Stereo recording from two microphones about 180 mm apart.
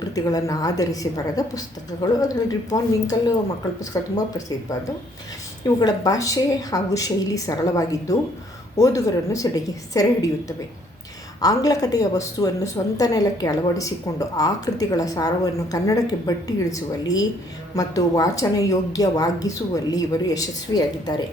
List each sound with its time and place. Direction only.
0.0 s speech: 20° left (ahead or behind)
11.3 s speech: 20° left (ahead or behind)